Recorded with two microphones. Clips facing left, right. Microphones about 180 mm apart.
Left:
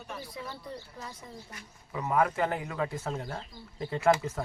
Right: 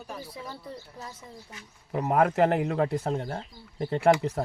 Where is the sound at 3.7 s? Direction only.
55° right (ahead or behind).